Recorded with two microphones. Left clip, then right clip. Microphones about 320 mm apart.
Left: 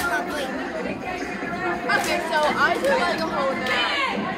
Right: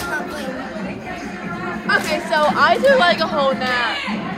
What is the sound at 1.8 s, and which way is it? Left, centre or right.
Speech, right.